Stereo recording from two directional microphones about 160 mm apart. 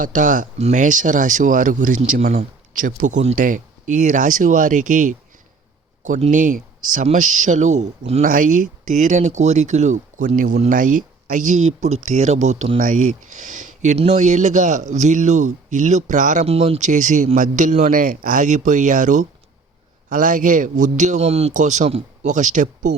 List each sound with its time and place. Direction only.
0.0 s speech: 55° right (ahead or behind)
8.2 s speech: 55° right (ahead or behind); by 12.8 s 40° right (ahead or behind)
12.8 s speech: 55° right (ahead or behind)